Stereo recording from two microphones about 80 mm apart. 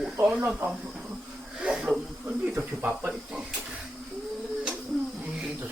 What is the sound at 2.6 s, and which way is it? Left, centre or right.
Speech, centre.